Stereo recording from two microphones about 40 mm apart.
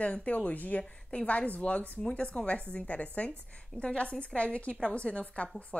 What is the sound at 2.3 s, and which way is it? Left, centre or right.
A woman's voice, left.